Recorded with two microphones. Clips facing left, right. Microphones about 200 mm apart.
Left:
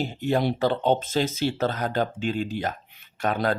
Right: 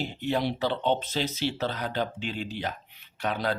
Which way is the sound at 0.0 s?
45° left (ahead or behind).